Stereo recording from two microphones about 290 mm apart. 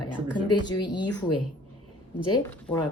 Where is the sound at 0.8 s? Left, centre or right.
Left.